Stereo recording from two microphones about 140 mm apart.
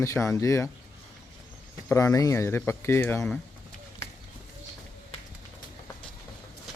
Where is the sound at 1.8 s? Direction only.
20° left (ahead or behind).